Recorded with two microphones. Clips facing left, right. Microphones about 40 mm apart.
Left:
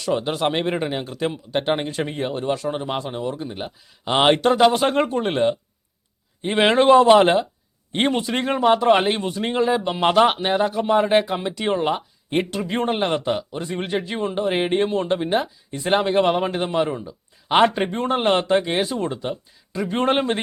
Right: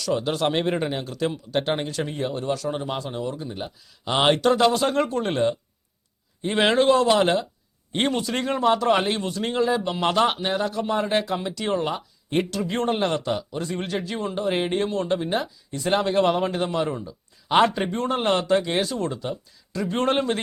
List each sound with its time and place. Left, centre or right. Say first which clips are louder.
0.0 s a man's voice: left 2 dB; left